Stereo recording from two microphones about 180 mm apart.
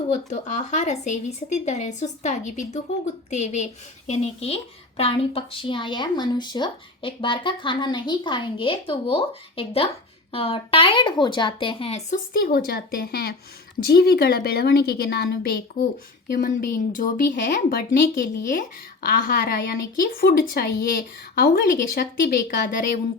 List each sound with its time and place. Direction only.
0.3 s a woman's voice: 40° left (ahead or behind)
12.3 s a woman's voice: 55° left (ahead or behind)